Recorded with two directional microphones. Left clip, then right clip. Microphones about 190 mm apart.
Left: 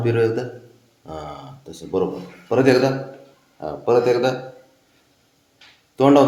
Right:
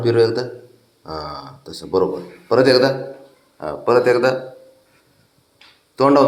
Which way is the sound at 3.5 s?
Centre (ahead or behind).